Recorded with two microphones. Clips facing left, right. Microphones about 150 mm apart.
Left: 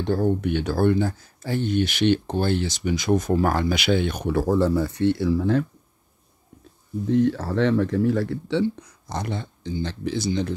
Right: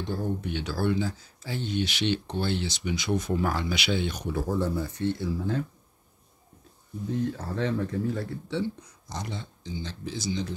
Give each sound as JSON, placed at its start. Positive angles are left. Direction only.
{"t": 0.0, "sound": "speech", "side_deg": 65}
{"t": 7.1, "sound": "speech", "side_deg": 75}